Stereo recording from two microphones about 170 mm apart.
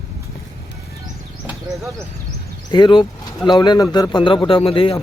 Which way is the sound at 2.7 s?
30° left (ahead or behind).